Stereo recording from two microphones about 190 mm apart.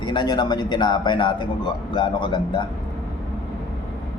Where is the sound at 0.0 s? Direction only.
25° left (ahead or behind).